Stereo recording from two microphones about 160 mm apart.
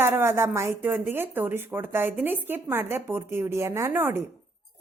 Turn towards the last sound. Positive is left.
turn(degrees=-15)  # may be behind; listen again after turning